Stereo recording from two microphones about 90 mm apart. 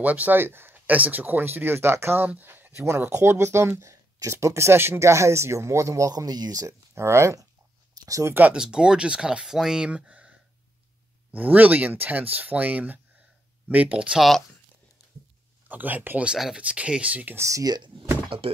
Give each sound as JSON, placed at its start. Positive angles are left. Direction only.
{"t": 0.0, "sound": "speech", "side_deg": -20}
{"t": 7.0, "sound": "speech", "side_deg": -30}
{"t": 8.5, "sound": "speech", "side_deg": -5}
{"t": 11.3, "sound": "speech", "side_deg": -20}
{"t": 15.7, "sound": "speech", "side_deg": -20}
{"t": 16.3, "sound": "speech", "side_deg": -5}
{"t": 17.4, "sound": "speech", "side_deg": -35}
{"t": 18.4, "sound": "speech", "side_deg": -90}